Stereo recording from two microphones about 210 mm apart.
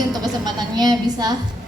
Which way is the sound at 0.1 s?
20° right (ahead or behind).